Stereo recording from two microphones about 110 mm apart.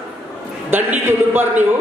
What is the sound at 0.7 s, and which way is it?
Speech, 20° right (ahead or behind).